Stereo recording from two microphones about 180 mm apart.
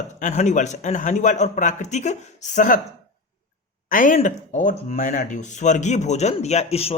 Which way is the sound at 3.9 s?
50° left (ahead or behind).